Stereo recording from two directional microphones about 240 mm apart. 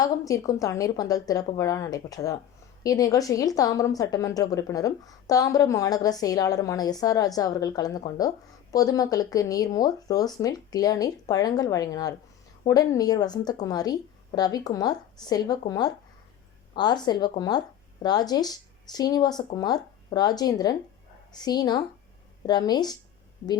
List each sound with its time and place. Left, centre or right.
0.0 s a woman's voice: centre